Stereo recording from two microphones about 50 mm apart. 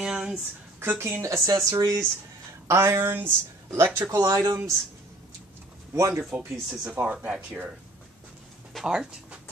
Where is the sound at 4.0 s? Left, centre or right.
Right.